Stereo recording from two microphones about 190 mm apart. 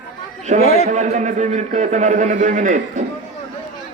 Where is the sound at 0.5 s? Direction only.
40° right (ahead or behind).